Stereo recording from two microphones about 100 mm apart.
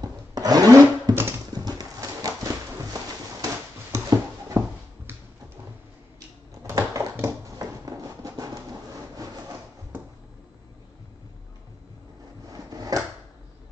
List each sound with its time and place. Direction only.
0.3 s blender: 40° right (ahead or behind)
1.5 s horse: 40° right (ahead or behind)
3.9 s a sound: 30° right (ahead or behind)
6.1 s a sound: 30° right (ahead or behind)
7.5 s rub: 35° right (ahead or behind)
12.5 s drawer open or close: 40° right (ahead or behind)